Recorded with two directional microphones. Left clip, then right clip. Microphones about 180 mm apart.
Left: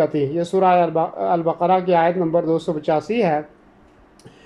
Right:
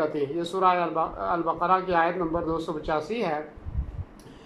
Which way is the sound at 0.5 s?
20° left (ahead or behind).